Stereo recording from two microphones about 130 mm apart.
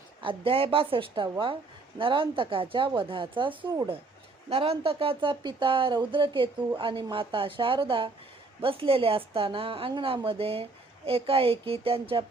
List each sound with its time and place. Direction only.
0.2 s a woman's voice: 45° right (ahead or behind)